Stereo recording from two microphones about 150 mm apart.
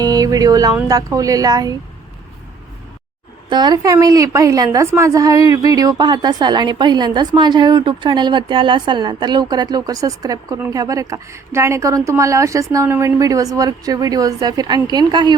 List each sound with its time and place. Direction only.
0.0 s a woman's voice: 25° right (ahead or behind)
3.5 s a woman's voice: 30° right (ahead or behind)